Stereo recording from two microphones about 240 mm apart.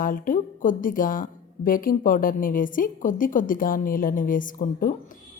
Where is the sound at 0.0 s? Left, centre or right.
Left.